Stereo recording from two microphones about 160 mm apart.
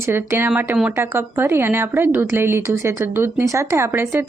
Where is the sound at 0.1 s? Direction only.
15° right (ahead or behind).